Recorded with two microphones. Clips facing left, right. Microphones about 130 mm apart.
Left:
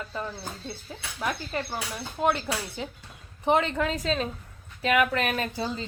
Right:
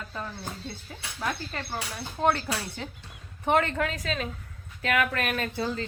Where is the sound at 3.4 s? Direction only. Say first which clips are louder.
Left 1 dB; 15° left (ahead or behind).